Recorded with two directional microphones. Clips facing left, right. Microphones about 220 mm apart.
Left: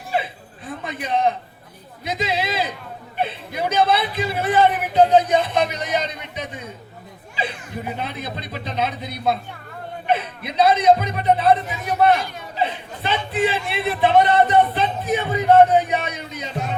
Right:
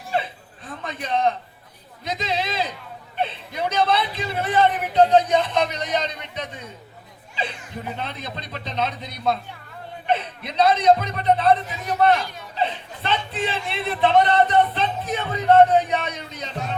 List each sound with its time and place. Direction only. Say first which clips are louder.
0.8 s a man's voice: left 1 dB; 5° left (ahead or behind)